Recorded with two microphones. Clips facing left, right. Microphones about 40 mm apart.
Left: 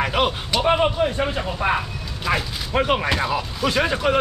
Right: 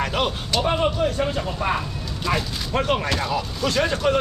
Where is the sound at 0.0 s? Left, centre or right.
Centre.